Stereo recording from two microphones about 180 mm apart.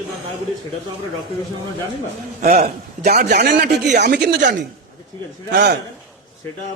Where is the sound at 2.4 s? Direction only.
50° right (ahead or behind); by 4.5 s 70° right (ahead or behind).